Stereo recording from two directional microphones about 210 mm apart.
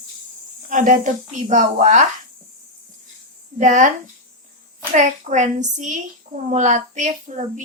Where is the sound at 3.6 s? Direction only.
35° right (ahead or behind).